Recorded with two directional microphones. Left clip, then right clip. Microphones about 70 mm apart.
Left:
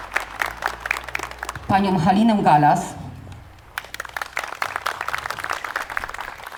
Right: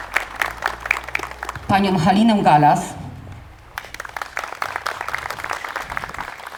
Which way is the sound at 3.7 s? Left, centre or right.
Left.